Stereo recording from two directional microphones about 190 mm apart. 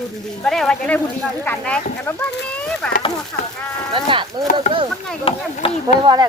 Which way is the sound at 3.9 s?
25° right (ahead or behind).